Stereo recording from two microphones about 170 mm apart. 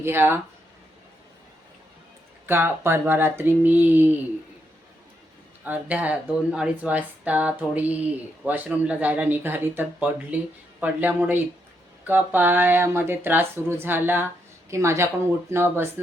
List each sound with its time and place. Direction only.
0.0 s speech: 15° right (ahead or behind)
2.5 s speech: 15° right (ahead or behind)
5.6 s speech: 10° right (ahead or behind)